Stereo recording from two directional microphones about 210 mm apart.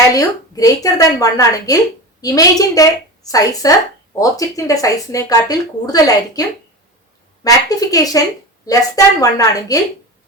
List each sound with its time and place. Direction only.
0.1 s speech: 15° left (ahead or behind)
7.4 s speech: 15° left (ahead or behind)